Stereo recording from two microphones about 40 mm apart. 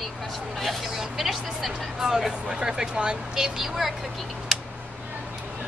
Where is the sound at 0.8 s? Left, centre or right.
Centre.